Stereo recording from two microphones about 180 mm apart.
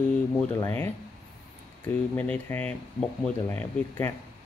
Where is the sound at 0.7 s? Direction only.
10° left (ahead or behind).